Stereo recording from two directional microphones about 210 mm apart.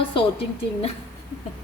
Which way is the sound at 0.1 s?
25° left (ahead or behind).